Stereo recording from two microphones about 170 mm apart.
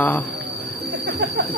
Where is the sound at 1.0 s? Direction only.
70° right (ahead or behind).